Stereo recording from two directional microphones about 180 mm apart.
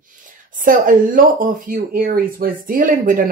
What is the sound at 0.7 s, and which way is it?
Speech, 50° right (ahead or behind).